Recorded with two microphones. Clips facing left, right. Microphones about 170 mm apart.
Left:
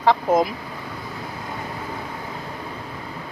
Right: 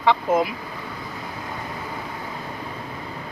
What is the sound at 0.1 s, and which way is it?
Speech, 40° left (ahead or behind).